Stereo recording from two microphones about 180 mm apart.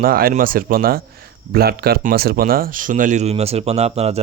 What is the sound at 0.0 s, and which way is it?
Speech, 55° right (ahead or behind).